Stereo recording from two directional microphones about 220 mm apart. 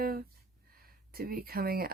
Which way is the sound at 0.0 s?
40° right (ahead or behind).